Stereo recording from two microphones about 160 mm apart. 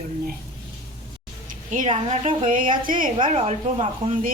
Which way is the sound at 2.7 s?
55° right (ahead or behind).